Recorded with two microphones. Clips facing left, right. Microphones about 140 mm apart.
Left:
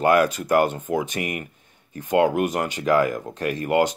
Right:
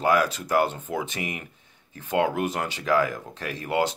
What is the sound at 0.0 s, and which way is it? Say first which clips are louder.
Speech: left 4 dB; 55° left (ahead or behind).